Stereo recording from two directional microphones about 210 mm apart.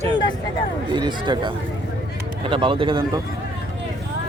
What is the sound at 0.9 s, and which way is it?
Speech, 20° right (ahead or behind).